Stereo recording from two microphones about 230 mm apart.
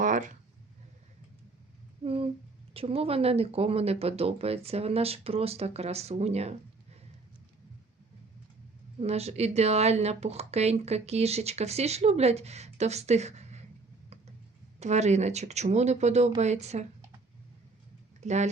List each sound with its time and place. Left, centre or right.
0.0 s a sound: right
2.0 s speech: right
9.0 s speech: right
14.8 s speech: right
18.2 s speech: right